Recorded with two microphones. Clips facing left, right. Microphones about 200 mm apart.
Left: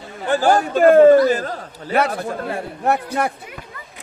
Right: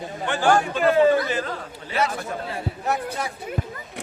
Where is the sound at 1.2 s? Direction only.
40° left (ahead or behind).